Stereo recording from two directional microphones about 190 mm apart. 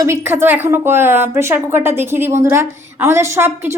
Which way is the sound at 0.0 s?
15° right (ahead or behind).